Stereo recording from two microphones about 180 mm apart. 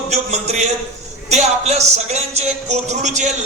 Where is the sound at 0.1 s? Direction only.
40° right (ahead or behind).